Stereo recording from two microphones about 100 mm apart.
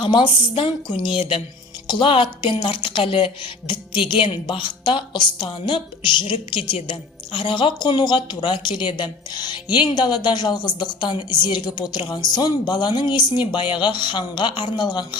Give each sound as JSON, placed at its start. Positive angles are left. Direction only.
{"t": 0.0, "sound": "speech", "side_deg": 55}
{"t": 7.3, "sound": "a woman's voice", "side_deg": 55}